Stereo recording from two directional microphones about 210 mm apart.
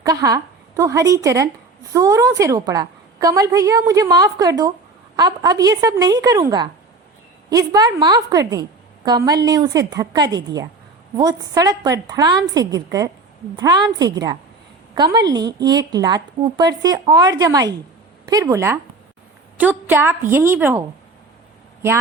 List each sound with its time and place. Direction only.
0.0 s a woman's voice: 15° right (ahead or behind)